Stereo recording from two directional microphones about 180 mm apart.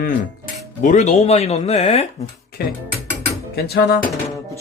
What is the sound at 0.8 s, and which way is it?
Speech, 45° left (ahead or behind).